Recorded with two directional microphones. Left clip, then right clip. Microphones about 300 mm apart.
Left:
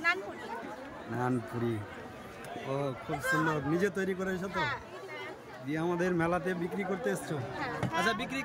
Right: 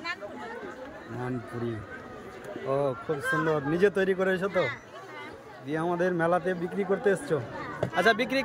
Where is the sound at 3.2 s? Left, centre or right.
Left.